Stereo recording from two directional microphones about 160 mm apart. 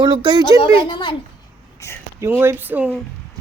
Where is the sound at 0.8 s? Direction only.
30° left (ahead or behind).